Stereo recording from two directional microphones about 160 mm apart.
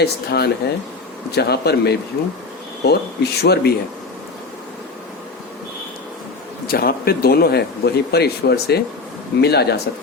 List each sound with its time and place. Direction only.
0.0 s speech: 90° left
6.7 s speech: 70° left (ahead or behind); by 9.8 s 90° left